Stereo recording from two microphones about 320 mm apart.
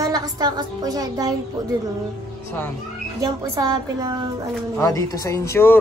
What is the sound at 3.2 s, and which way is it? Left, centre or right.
Speech, centre.